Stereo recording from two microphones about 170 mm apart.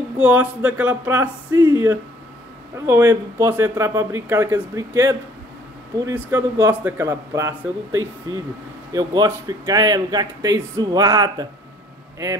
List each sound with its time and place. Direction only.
0.2 s speech: 10° right (ahead or behind)